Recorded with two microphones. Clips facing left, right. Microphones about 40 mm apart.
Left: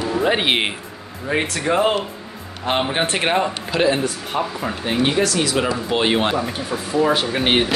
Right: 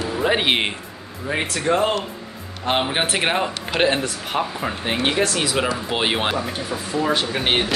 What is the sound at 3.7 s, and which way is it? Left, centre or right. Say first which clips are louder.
Speech: even; right.